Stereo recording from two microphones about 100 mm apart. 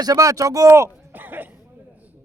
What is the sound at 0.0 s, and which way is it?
Speech, 35° right (ahead or behind).